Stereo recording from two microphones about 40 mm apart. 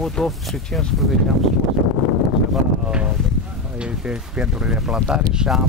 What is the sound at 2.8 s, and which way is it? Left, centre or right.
Speech, right.